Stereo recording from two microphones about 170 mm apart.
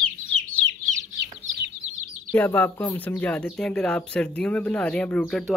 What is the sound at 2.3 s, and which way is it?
Speech, 10° left (ahead or behind).